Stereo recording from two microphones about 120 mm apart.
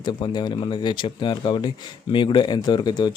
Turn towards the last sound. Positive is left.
turn(degrees=40)  # may be behind; listen again after turning